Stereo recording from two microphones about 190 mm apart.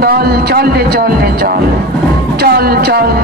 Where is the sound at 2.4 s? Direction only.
55° right (ahead or behind).